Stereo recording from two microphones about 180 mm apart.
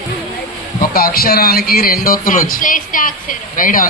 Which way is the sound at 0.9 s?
55° left (ahead or behind).